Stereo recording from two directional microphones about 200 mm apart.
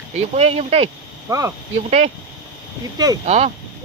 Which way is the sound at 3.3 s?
35° right (ahead or behind).